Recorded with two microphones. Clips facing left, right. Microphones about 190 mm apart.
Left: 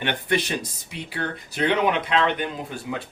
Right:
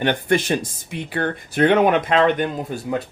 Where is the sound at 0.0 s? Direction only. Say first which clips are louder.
Right 5 dB; 45° right (ahead or behind).